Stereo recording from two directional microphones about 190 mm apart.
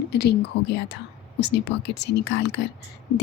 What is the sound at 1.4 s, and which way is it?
Speech, 65° left (ahead or behind).